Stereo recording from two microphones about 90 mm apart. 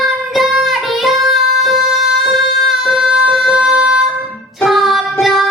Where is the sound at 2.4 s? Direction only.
Centre (ahead or behind).